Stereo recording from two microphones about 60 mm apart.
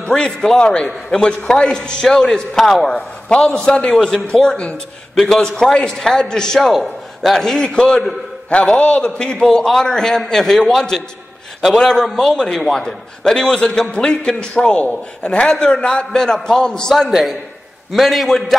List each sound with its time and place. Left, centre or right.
0.0 s a man's voice: centre
5.1 s a man's voice: centre
8.5 s a man's voice: centre
16.9 s a man's voice: centre